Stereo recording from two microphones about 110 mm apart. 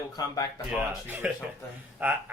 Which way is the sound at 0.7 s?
15° right (ahead or behind).